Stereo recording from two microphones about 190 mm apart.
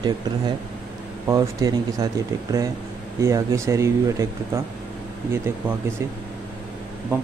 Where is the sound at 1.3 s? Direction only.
20° right (ahead or behind).